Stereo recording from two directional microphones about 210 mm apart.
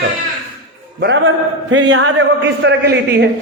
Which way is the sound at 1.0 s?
60° right (ahead or behind).